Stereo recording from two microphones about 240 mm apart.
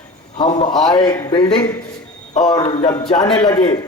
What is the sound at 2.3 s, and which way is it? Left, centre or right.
A man's voice, centre.